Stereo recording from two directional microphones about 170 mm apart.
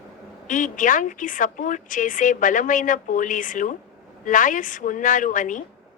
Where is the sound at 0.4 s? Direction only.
50° left (ahead or behind).